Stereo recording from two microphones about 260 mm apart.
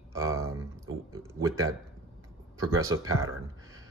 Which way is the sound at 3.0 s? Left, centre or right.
Right.